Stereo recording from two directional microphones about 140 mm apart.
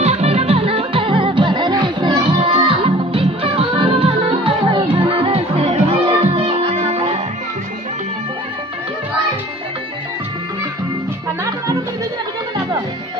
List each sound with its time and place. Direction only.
0.0 s music: 50° right (ahead or behind)